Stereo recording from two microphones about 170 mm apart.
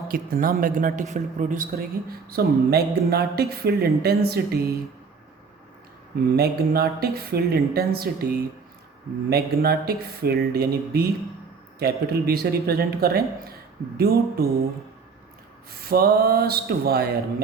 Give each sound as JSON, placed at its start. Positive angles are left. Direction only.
{"t": 0.1, "sound": "a woman's voice", "side_deg": -55}
{"t": 6.3, "sound": "a woman's voice", "side_deg": -65}
{"t": 9.3, "sound": "a woman's voice", "side_deg": -65}
{"t": 15.7, "sound": "a woman's voice", "side_deg": -65}